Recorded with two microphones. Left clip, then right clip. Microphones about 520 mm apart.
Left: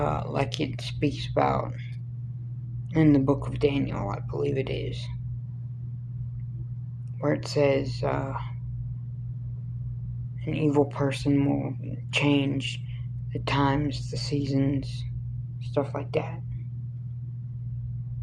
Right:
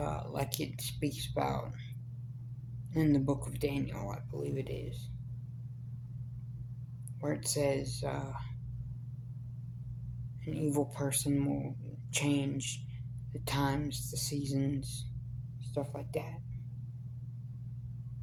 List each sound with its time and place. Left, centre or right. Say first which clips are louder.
0.0 s speech: left 10 dB; right
2.9 s speech: left 9 dB; right
7.2 s speech: left 9 dB; right
10.4 s speech: left 10 dB; right